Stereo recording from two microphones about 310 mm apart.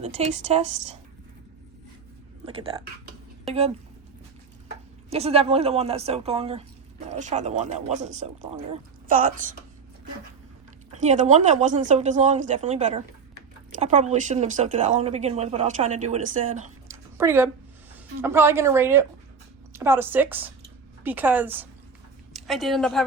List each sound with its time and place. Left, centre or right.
0.0 s speech: right
5.1 s speech: centre
10.9 s speech: right
16.9 s a sound: centre
18.2 s a woman's voice: centre